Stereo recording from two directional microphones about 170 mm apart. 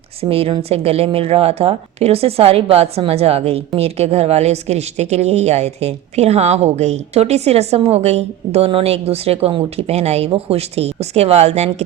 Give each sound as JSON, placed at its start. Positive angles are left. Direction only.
{"t": 0.2, "sound": "speech", "side_deg": -35}